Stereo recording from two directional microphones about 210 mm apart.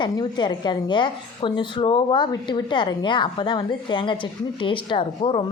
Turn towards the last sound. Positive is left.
turn(degrees=25)  # may be behind; listen again after turning